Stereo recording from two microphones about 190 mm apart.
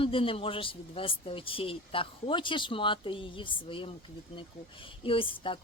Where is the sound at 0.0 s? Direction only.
30° left (ahead or behind).